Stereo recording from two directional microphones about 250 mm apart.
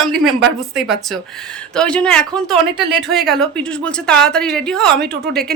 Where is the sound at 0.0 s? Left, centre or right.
Centre.